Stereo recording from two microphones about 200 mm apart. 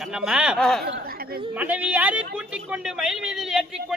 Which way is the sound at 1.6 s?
5° right (ahead or behind).